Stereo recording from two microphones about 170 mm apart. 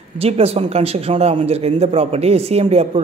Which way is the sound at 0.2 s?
35° right (ahead or behind).